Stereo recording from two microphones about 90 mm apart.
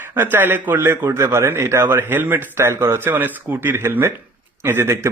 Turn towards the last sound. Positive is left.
turn(degrees=-25)  # may be behind; listen again after turning